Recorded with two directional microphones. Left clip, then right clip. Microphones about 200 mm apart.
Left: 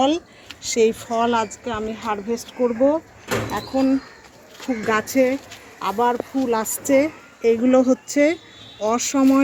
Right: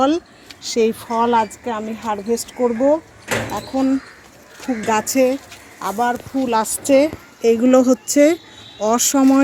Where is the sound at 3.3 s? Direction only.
55° left (ahead or behind).